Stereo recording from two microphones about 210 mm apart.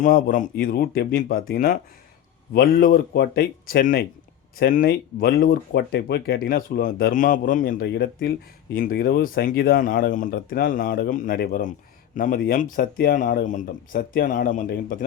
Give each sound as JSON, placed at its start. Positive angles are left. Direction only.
{"t": 0.0, "sound": "speech", "side_deg": 40}